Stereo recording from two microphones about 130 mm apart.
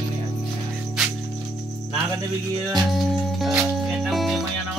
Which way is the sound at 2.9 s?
Centre (ahead or behind).